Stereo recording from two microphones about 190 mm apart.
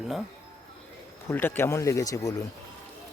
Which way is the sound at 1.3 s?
10° left (ahead or behind).